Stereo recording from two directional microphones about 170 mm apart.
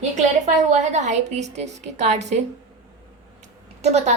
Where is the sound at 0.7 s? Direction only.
40° right (ahead or behind).